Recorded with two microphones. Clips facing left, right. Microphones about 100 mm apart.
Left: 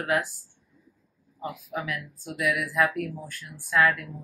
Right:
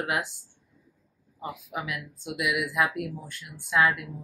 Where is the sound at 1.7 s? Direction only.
20° right (ahead or behind).